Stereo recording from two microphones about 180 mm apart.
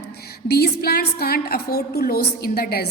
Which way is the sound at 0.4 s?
60° left (ahead or behind).